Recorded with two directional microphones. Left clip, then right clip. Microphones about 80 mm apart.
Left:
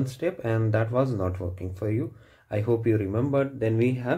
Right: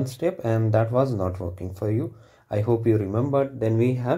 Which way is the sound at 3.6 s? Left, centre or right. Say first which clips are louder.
Right 2 dB; right.